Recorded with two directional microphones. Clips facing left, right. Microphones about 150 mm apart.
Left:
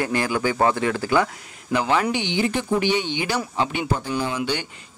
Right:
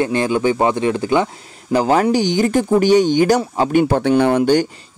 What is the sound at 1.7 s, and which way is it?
Speech, 40° right (ahead or behind).